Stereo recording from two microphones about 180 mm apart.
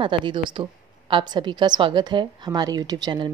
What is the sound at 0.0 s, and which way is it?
A woman's voice, 25° right (ahead or behind).